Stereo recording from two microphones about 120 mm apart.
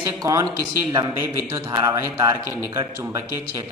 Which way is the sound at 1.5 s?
25° right (ahead or behind).